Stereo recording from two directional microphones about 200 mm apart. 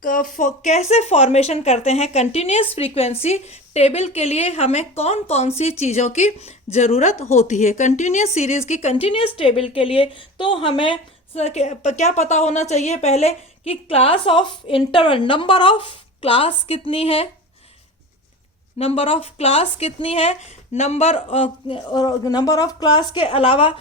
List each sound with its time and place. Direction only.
0.0 s a woman's voice: 45° left (ahead or behind)
18.8 s a woman's voice: 30° left (ahead or behind)